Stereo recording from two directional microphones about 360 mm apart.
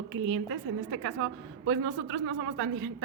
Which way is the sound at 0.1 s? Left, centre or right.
Right.